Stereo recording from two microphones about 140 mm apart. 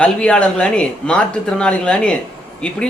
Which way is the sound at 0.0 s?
10° left (ahead or behind).